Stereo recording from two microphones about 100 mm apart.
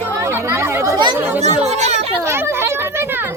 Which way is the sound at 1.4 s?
90° right.